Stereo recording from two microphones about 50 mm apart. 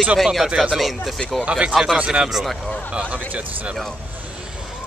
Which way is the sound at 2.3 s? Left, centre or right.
Centre.